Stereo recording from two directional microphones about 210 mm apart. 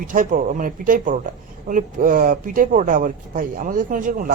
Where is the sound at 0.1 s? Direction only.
40° right (ahead or behind).